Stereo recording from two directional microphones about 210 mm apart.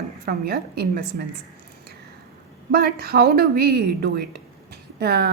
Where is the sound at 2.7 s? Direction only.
50° right (ahead or behind).